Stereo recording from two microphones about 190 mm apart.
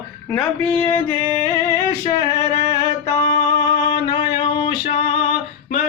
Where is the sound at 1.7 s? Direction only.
20° left (ahead or behind).